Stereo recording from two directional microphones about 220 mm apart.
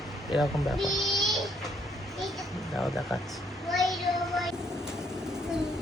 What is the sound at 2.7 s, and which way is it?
Speech, centre (ahead or behind).